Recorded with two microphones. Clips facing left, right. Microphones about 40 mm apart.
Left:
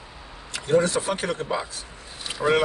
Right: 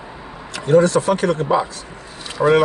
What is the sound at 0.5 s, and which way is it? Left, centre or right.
Speech, centre.